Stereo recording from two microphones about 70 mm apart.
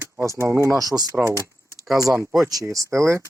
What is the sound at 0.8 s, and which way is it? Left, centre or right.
Speech, right.